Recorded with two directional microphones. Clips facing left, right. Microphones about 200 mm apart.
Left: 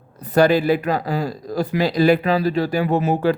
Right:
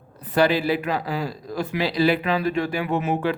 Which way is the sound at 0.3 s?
45° left (ahead or behind).